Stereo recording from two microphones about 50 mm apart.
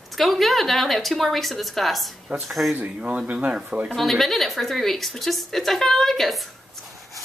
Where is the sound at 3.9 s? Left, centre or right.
Centre.